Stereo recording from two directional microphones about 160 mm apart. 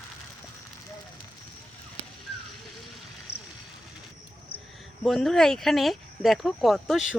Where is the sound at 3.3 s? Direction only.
80° left.